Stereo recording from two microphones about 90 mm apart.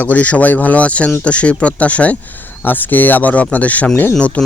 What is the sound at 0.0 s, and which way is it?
Speech, 15° left (ahead or behind).